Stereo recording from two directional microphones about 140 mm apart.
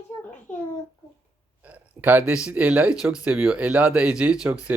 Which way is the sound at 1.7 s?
15° right (ahead or behind).